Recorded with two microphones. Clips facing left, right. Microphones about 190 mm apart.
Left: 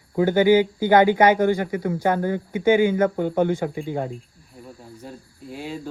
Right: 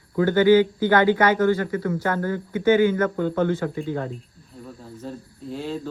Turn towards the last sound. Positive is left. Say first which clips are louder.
# right 3 dB
turn(degrees=10)  # may be behind; listen again after turning